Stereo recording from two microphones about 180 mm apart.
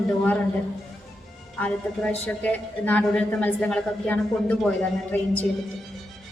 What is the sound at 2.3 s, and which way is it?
A woman's voice, 10° left (ahead or behind).